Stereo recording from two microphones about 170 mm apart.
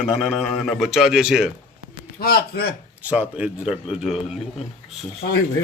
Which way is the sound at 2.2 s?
65° left (ahead or behind).